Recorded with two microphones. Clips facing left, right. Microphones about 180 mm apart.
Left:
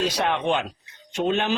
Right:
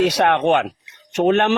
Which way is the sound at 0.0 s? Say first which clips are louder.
Right 7 dB; 75° right (ahead or behind).